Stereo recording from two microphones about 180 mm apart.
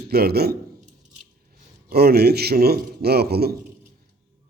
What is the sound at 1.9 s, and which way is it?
A man's voice, 60° right (ahead or behind).